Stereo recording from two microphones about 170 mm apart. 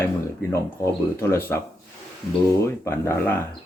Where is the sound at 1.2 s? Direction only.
15° left (ahead or behind).